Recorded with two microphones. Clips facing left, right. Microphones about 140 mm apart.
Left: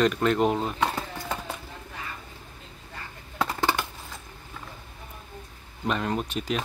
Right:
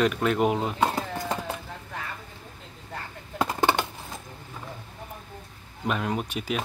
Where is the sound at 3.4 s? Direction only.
15° right (ahead or behind).